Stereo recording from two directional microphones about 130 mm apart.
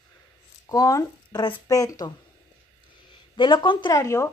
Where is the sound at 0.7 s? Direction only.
25° left (ahead or behind).